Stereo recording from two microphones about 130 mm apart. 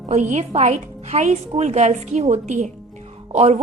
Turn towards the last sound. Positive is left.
turn(degrees=-55)  # may be behind; listen again after turning